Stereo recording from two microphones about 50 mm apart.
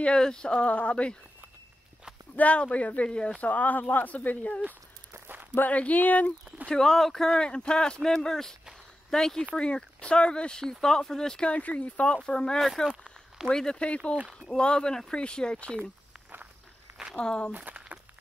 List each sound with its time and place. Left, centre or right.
0.0 s speech: centre
2.3 s speech: left
3.4 s speech: left
5.1 s walk: right
5.6 s speech: left
6.7 s speech: centre
9.6 s speech: left
11.5 s speech: left
12.5 s speech: centre
13.5 s speech: centre
17.1 s speech: centre
17.5 s speech: right